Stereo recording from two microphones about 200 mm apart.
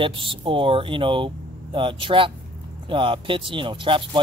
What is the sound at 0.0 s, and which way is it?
Speech, 25° right (ahead or behind).